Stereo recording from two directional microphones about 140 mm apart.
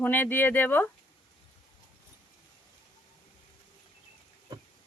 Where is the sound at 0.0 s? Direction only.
15° left (ahead or behind).